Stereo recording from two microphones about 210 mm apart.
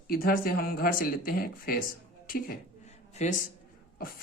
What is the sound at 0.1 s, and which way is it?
Speech, 45° left (ahead or behind).